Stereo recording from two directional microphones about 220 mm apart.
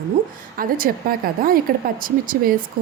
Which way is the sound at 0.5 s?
40° right (ahead or behind).